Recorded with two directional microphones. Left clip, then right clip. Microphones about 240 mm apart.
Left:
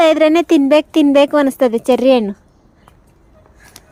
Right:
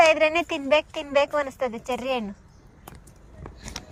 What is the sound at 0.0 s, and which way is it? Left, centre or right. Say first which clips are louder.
Speech: left 8 dB; left.